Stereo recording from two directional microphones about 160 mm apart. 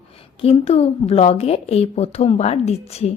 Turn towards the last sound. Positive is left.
turn(degrees=40)  # may be behind; listen again after turning